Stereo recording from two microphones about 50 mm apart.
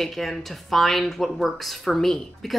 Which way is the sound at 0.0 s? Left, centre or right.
Centre.